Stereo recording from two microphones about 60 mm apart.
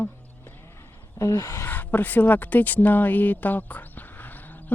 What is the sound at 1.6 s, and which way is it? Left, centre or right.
Speech, left.